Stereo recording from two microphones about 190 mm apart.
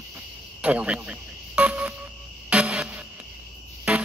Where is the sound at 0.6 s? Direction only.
5° right (ahead or behind).